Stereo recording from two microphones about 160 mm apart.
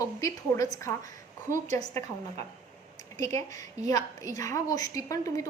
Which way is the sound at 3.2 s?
20° left (ahead or behind).